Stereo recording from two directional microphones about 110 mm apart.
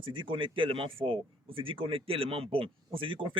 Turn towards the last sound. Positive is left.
turn(degrees=-50)  # may be behind; listen again after turning